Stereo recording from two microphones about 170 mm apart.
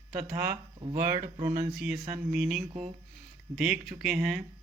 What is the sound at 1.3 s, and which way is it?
Speech, 45° right (ahead or behind).